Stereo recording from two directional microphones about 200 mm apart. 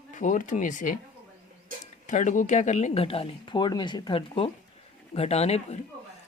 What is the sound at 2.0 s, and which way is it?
A woman's voice, 40° left (ahead or behind).